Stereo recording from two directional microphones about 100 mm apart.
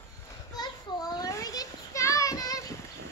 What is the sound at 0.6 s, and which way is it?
Children playing, 40° left (ahead or behind).